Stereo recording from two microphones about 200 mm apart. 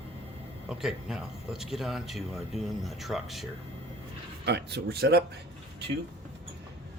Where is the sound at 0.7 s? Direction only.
5° right (ahead or behind).